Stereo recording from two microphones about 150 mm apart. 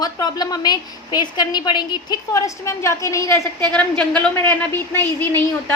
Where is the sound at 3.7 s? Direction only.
10° left (ahead or behind).